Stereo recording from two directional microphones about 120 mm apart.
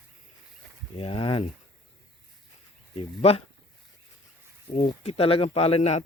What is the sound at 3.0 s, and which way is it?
Speech, 60° left (ahead or behind).